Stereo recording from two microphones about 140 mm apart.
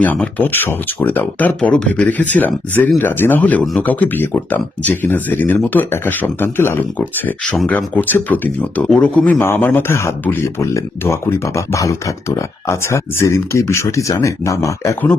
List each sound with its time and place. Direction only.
0.0 s speech: 10° left (ahead or behind)